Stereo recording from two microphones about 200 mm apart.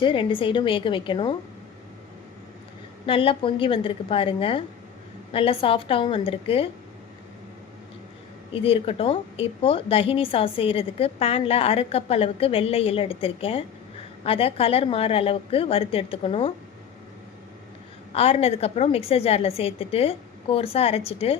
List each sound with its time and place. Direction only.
0.0 s speech: 25° left (ahead or behind)
3.1 s speech: 25° left (ahead or behind)
8.5 s speech: 30° left (ahead or behind)
18.1 s speech: 30° left (ahead or behind)